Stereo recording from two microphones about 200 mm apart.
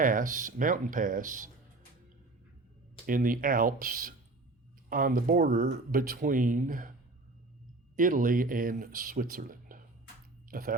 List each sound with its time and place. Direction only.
0.0 s speech: 40° right (ahead or behind)
3.1 s speech: 45° right (ahead or behind)
7.9 s speech: 40° right (ahead or behind)